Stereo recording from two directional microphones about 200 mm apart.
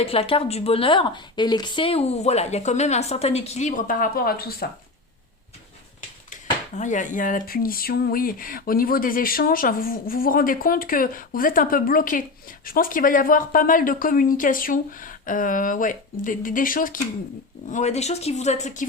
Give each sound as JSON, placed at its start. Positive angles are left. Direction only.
{"t": 0.0, "sound": "a woman's voice", "side_deg": 30}
{"t": 6.3, "sound": "a woman's voice", "side_deg": 40}